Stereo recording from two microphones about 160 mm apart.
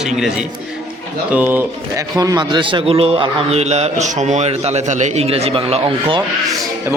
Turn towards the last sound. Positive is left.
turn(degrees=-35)  # may be behind; listen again after turning